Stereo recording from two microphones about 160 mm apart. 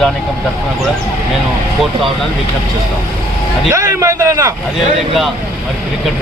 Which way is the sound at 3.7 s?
20° right (ahead or behind).